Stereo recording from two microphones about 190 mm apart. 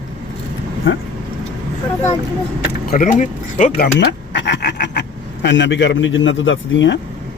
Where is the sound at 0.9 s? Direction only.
80° left.